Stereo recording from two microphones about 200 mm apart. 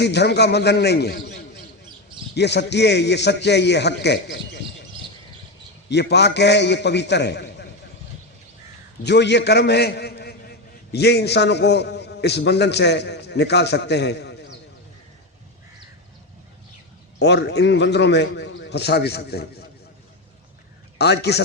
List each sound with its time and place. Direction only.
0.0 s a man's voice: 55° left (ahead or behind)
5.9 s a man's voice: 55° left (ahead or behind)
9.0 s a man's voice: 60° left (ahead or behind)
17.2 s a man's voice: 60° left (ahead or behind)
21.0 s a man's voice: 55° left (ahead or behind)